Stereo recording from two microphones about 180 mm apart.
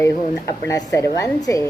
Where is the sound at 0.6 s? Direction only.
20° left (ahead or behind).